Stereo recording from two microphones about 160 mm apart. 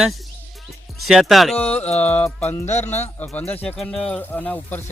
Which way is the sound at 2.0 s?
10° left (ahead or behind).